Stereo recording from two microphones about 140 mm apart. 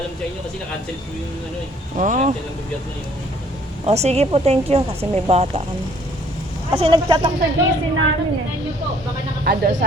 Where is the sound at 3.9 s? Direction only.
50° right (ahead or behind).